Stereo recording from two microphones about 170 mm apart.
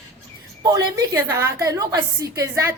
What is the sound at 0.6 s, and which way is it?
A woman's voice, 20° right (ahead or behind).